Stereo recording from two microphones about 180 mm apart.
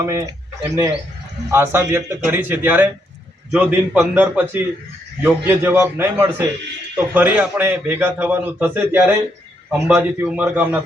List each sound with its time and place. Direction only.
0.0 s a man's voice: 20° right (ahead or behind)